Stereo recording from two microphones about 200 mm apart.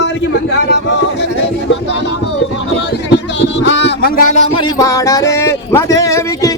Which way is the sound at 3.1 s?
65° left (ahead or behind).